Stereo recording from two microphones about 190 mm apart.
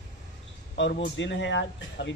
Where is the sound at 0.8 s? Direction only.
75° left (ahead or behind).